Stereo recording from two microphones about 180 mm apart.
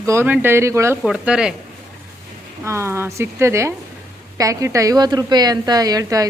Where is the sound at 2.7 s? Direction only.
15° right (ahead or behind).